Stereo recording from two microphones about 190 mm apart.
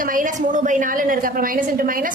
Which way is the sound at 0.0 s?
45° right (ahead or behind).